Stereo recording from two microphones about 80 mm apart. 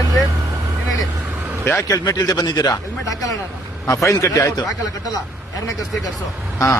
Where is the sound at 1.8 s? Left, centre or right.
Left.